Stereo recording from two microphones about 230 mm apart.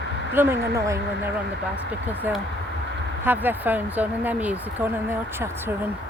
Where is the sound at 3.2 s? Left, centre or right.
Centre.